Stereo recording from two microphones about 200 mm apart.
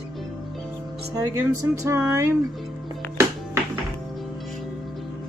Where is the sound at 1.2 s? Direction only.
15° right (ahead or behind).